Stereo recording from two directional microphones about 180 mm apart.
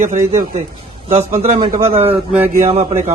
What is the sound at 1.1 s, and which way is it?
Speech, 35° right (ahead or behind).